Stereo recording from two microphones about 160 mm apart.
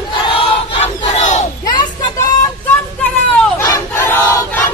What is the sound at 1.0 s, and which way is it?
Battle cry, 45° left (ahead or behind).